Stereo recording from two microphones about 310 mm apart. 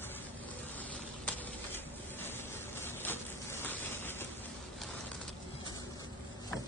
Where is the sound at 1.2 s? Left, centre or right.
Centre.